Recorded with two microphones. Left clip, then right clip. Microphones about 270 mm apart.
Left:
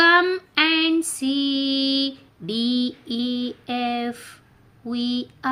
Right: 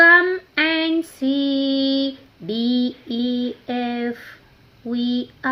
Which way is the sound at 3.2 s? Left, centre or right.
Centre.